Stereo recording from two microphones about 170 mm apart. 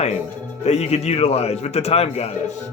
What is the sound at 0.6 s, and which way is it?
A man's voice, 40° left (ahead or behind).